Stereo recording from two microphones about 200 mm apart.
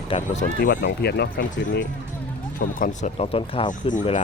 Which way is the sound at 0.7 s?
55° left (ahead or behind).